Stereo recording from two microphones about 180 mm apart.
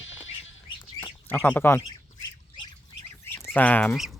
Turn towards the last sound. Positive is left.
turn(degrees=10)  # may be behind; listen again after turning